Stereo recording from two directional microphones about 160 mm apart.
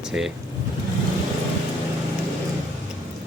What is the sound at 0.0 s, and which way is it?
Speech, 5° right (ahead or behind).